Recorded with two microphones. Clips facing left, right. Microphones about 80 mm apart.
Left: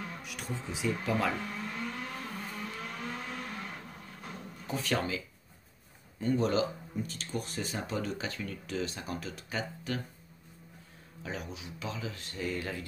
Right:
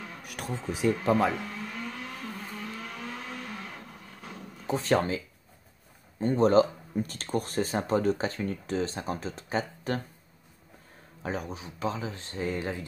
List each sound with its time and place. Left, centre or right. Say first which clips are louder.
0.2 s speech: right 3 dB; right
1.4 s a sound: right 1 dB; centre
2.5 s vehicle: right 1 dB; centre
4.6 s speech: right 7 dB; right
11.2 s speech: right 6 dB; right